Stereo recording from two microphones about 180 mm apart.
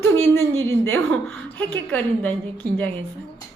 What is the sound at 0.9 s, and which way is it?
Speech, 10° left (ahead or behind).